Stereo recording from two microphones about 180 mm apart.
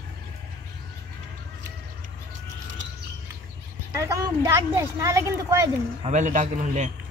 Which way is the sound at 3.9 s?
15° right (ahead or behind).